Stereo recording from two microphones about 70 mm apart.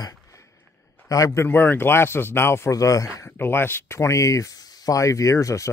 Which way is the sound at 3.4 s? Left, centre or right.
Left.